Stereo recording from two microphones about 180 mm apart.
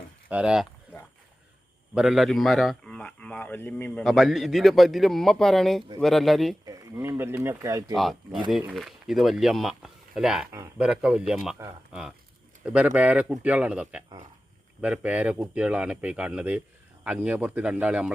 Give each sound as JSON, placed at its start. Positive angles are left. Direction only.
{"t": 0.3, "sound": "a man's voice", "side_deg": -5}
{"t": 2.0, "sound": "a man's voice", "side_deg": 0}
{"t": 6.7, "sound": "speech", "side_deg": -15}
{"t": 8.4, "sound": "a man's voice", "side_deg": 0}